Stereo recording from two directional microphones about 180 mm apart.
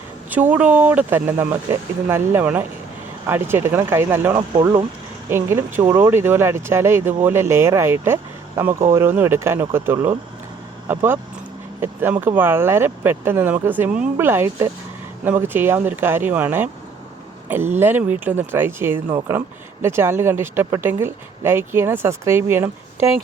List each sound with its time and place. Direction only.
0.3 s speech: 10° right (ahead or behind)
4.5 s speech: 25° right (ahead or behind)
5.3 s speech: 15° right (ahead or behind)